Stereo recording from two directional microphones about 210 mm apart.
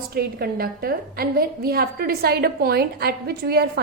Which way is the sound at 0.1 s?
45° right (ahead or behind).